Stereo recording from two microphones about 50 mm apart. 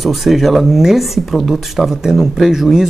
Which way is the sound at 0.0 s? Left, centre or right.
Centre.